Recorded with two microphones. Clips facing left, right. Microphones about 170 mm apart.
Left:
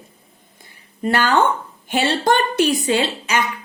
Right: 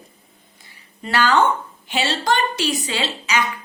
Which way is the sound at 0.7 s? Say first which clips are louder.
Left 6 dB; 50° left (ahead or behind).